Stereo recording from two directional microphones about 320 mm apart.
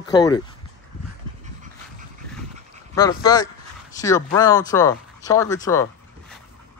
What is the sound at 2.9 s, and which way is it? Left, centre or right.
Speech, centre.